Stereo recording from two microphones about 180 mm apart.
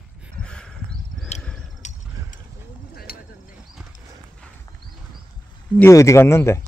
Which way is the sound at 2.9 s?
55° left (ahead or behind).